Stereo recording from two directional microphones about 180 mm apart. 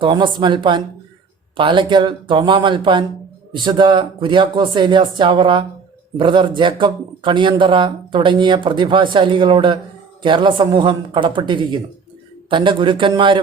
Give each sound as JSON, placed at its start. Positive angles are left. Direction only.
{"t": 0.0, "sound": "speech", "side_deg": -25}